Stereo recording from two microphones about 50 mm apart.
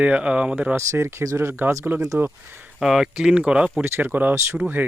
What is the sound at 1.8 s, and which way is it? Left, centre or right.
Speech, right.